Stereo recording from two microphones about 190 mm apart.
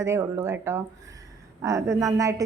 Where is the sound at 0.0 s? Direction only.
15° right (ahead or behind).